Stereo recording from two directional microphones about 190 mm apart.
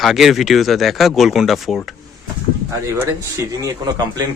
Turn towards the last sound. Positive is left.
turn(degrees=-20)  # may be behind; listen again after turning